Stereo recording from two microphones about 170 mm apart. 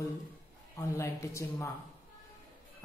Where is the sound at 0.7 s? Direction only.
15° left (ahead or behind).